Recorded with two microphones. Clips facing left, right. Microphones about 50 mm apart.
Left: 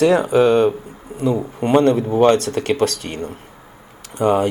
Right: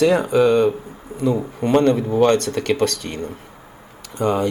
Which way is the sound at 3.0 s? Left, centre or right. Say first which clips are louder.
Left 1 dB; left.